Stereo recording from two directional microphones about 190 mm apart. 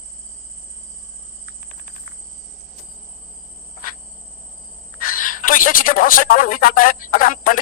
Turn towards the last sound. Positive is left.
turn(degrees=45)  # may be behind; listen again after turning